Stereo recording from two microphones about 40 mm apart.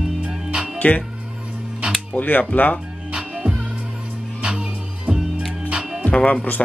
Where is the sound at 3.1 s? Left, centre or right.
Right.